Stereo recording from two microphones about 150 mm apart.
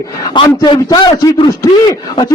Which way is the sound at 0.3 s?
30° left (ahead or behind).